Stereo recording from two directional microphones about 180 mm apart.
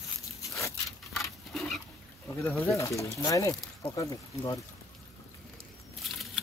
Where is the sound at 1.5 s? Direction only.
Centre (ahead or behind).